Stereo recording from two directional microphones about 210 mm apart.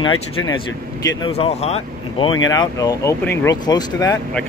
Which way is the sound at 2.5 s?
15° left (ahead or behind).